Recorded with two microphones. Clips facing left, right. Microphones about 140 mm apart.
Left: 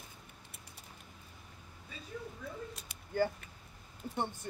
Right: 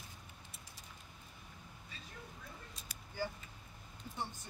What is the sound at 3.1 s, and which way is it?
Speech, 55° left (ahead or behind).